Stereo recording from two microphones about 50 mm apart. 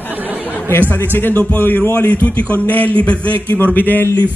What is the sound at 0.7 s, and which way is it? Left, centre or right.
A man's voice, left.